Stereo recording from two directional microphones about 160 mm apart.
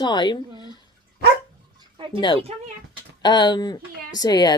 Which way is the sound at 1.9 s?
30° right (ahead or behind).